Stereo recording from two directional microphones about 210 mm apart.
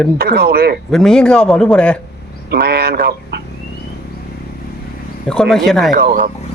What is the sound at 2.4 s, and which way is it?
Speech, 50° right (ahead or behind).